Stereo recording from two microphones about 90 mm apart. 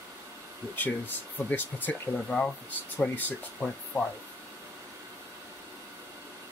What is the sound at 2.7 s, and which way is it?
Speech, 20° left (ahead or behind).